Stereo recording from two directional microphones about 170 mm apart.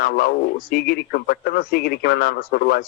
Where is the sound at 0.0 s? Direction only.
60° left (ahead or behind).